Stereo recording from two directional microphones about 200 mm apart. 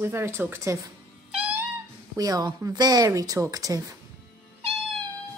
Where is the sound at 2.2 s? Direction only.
20° right (ahead or behind).